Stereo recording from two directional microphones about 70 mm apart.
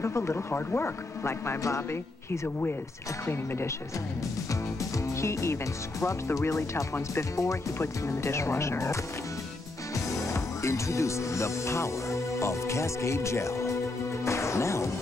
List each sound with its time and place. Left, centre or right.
0.0 s a man's voice: left
4.9 s speech: left
9.9 s music: left